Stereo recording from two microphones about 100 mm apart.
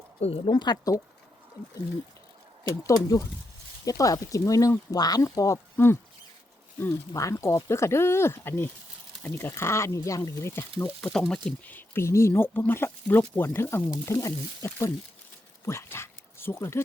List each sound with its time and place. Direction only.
0.2 s speech: 85° left
0.5 s speech: 45° left (ahead or behind)
2.8 s speech: 35° left (ahead or behind)
5.7 s speech: 25° left (ahead or behind)
7.1 s speech: 35° left (ahead or behind)
11.1 s speech: 5° left (ahead or behind)
11.7 s speech: 20° left (ahead or behind)